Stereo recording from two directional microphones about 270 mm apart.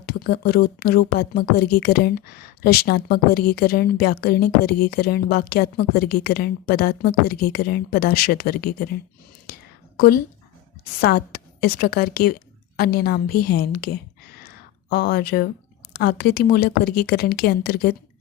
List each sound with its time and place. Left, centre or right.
0.0 s speech: left
11.0 s a woman's voice: left
13.4 s a sound: left
15.9 s speech: left